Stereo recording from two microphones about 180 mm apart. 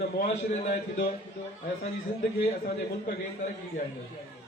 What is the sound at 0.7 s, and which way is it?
Speech, 60° left (ahead or behind).